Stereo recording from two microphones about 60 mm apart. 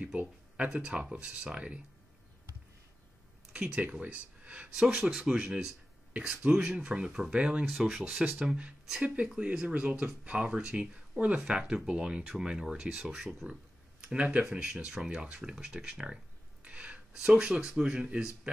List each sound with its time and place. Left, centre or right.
0.0 s a sound: right
0.7 s speech: centre
3.5 s speech: centre
4.0 s speech: right
16.6 s a sound: right
17.1 s speech: centre